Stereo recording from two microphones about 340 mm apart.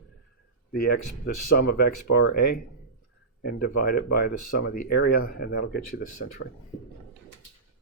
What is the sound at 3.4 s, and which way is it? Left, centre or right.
Speech, left.